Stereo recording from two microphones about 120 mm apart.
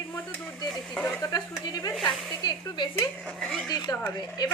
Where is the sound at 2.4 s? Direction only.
40° left (ahead or behind).